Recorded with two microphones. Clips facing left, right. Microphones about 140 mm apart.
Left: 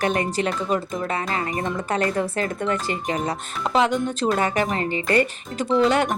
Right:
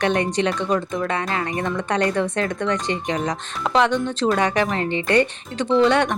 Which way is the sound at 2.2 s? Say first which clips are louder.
Right 2 dB; 5° left (ahead or behind).